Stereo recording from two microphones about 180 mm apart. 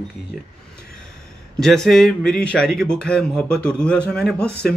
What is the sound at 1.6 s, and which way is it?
Speech, centre (ahead or behind).